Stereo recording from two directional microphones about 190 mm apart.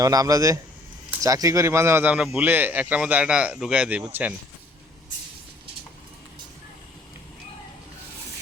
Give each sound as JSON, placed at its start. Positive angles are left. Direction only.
{"t": 0.0, "sound": "a man's voice", "side_deg": -20}